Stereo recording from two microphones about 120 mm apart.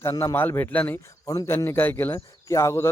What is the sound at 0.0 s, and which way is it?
A man's voice, 25° left (ahead or behind).